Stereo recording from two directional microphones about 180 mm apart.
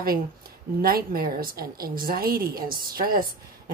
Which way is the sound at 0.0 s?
55° right (ahead or behind).